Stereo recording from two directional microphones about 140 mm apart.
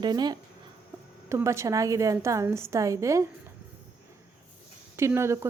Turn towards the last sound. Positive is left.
turn(degrees=-20)  # may be behind; listen again after turning